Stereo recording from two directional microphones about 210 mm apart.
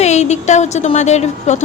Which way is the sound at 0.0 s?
35° left (ahead or behind).